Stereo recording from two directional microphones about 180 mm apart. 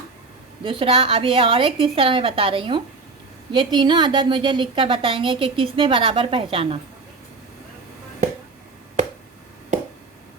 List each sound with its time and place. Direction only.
0.6 s a woman's voice: 30° right (ahead or behind)